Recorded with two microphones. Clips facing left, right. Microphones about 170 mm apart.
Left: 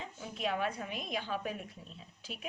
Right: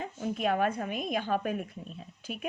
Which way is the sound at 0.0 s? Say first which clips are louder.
Right 7 dB; 50° right (ahead or behind).